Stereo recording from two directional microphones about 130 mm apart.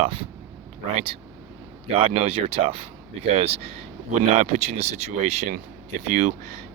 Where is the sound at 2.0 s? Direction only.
50° right (ahead or behind).